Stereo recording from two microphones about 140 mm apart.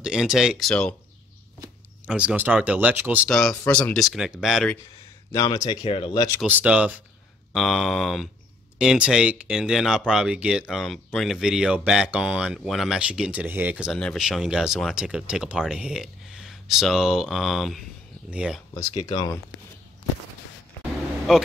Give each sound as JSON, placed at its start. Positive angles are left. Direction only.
{"t": 0.0, "sound": "speech", "side_deg": -5}
{"t": 2.0, "sound": "speech", "side_deg": -10}
{"t": 3.3, "sound": "speech", "side_deg": 5}
{"t": 5.3, "sound": "speech", "side_deg": 25}
{"t": 5.9, "sound": "speech", "side_deg": 40}
{"t": 6.4, "sound": "speech", "side_deg": -10}
{"t": 18.8, "sound": "speech", "side_deg": 25}
{"t": 21.3, "sound": "speech", "side_deg": -5}